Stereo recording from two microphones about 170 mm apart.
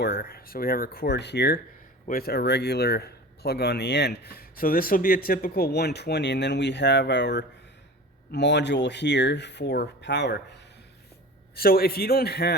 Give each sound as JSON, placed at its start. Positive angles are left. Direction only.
{"t": 0.0, "sound": "speech", "side_deg": 65}
{"t": 2.0, "sound": "speech", "side_deg": 60}
{"t": 11.5, "sound": "speech", "side_deg": 65}